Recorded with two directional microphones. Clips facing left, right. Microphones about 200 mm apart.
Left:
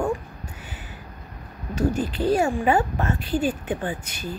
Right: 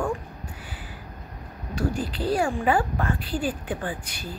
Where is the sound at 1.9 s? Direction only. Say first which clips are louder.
Left 4 dB; 20° left (ahead or behind).